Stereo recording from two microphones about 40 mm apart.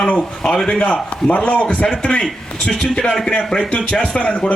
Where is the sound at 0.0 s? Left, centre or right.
Centre.